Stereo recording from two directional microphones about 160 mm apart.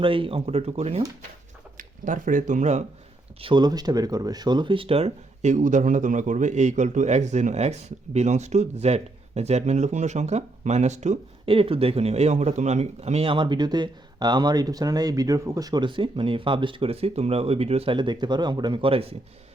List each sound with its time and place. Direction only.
0.0 s speech: 35° right (ahead or behind)
2.0 s speech: 55° right (ahead or behind)
3.4 s speech: 25° right (ahead or behind)